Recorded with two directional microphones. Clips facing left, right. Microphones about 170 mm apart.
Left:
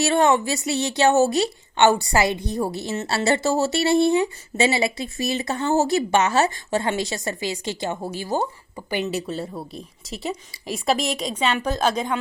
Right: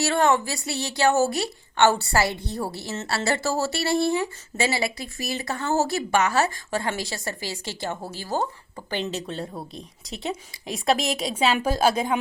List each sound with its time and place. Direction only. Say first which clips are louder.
0.0 s a woman's voice: left 3 dB; 20° left (ahead or behind); by 12.2 s 10° right (ahead or behind)